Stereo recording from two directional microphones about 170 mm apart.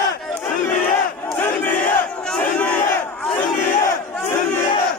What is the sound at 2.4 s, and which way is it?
Crowd, 10° left (ahead or behind).